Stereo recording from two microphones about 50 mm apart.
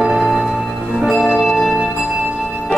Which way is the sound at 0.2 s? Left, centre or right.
Centre.